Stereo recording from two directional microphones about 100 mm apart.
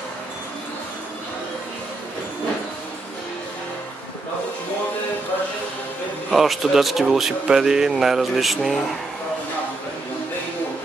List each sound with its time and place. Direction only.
6.3 s speech: centre (ahead or behind)